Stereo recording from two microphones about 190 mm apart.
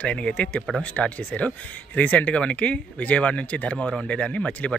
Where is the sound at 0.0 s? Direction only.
5° left (ahead or behind).